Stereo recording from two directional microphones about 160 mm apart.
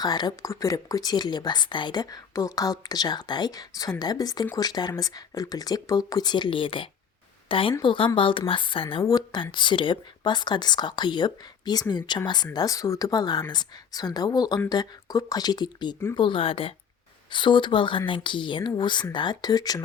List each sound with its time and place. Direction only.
0.0 s speech: 25° left (ahead or behind)